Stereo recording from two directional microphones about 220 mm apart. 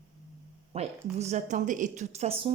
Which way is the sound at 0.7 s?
30° right (ahead or behind).